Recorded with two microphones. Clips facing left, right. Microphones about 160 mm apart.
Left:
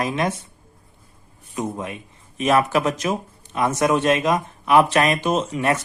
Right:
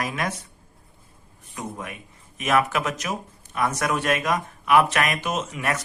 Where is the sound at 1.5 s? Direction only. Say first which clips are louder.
Left 7 dB; 25° left (ahead or behind).